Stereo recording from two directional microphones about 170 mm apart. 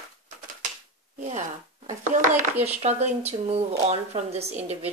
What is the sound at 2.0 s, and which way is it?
Speech, 50° right (ahead or behind).